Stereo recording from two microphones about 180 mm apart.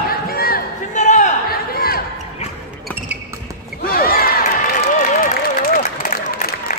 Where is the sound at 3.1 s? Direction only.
15° right (ahead or behind).